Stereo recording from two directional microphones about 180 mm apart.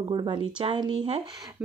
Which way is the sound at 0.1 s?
25° right (ahead or behind).